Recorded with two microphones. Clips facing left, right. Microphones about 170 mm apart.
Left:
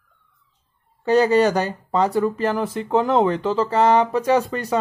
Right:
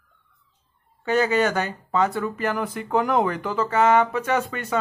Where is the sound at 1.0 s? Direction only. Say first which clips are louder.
Left 5 dB; 35° left (ahead or behind).